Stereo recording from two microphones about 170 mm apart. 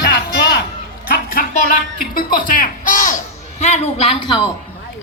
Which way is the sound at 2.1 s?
55° left (ahead or behind).